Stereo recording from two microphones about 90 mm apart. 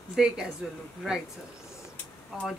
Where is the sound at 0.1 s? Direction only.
5° right (ahead or behind).